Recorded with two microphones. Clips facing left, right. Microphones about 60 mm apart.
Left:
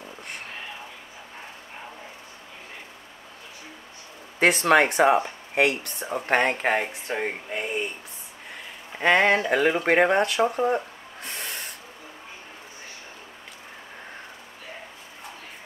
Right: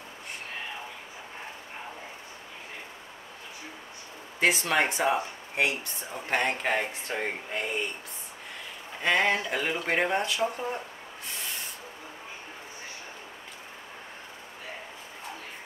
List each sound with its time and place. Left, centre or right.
4.4 s speech: left
6.5 s speech: left
9.0 s speech: left
11.2 s owl: left